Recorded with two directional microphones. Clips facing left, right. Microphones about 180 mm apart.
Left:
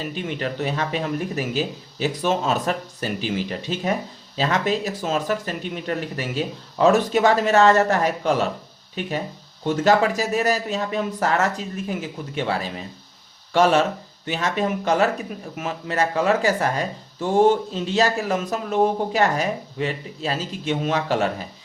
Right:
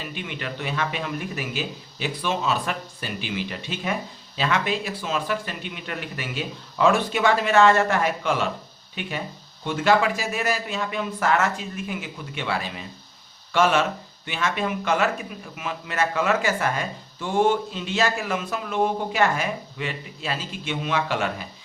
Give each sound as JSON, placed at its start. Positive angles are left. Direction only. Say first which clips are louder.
{"t": 0.0, "sound": "speech", "louder": "left 6 dB", "side_deg": 40}